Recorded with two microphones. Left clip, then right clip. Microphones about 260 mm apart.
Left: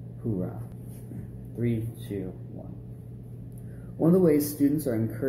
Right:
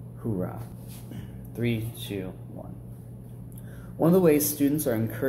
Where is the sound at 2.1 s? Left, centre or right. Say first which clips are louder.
Even; centre.